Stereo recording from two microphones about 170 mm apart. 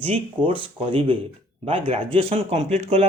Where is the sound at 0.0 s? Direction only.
35° right (ahead or behind).